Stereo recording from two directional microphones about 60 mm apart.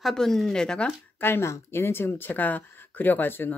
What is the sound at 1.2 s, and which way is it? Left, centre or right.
Speech, left.